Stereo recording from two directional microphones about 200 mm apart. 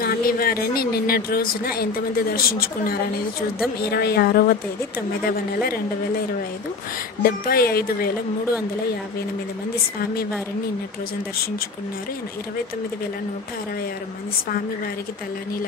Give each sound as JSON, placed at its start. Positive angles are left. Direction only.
{"t": 0.0, "sound": "a woman's voice", "side_deg": 45}
{"t": 7.2, "sound": "a woman's voice", "side_deg": 50}